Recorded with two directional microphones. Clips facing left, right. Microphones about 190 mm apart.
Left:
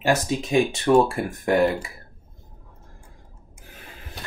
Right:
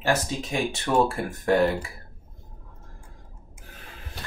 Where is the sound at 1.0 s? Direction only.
15° left (ahead or behind).